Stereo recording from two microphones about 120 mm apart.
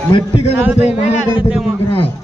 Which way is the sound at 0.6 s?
5° right (ahead or behind).